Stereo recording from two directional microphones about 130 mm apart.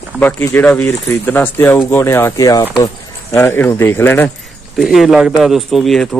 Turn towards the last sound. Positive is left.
turn(degrees=5)  # may be behind; listen again after turning